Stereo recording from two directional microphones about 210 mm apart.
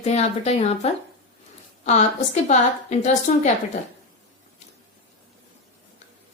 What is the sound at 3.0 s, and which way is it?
Speech, 35° left (ahead or behind).